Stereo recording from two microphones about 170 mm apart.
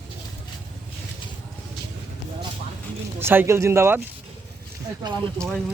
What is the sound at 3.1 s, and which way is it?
Speech, 15° right (ahead or behind).